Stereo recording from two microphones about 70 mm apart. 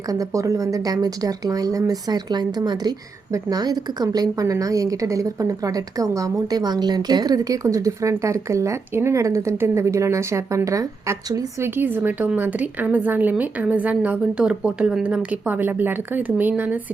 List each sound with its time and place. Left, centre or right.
0.1 s speech: right
3.3 s a woman's voice: right
11.6 s a woman's voice: right